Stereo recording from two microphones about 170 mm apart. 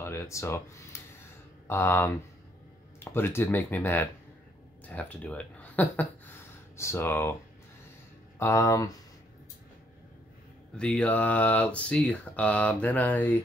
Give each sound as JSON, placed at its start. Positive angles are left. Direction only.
{"t": 0.0, "sound": "speech", "side_deg": 15}
{"t": 8.4, "sound": "speech", "side_deg": 15}
{"t": 10.8, "sound": "speech", "side_deg": 5}